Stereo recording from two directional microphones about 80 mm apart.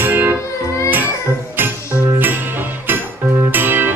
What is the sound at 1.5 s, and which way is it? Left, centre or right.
Music, right.